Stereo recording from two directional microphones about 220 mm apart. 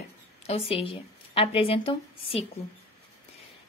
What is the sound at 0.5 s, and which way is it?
A woman's voice, 25° left (ahead or behind).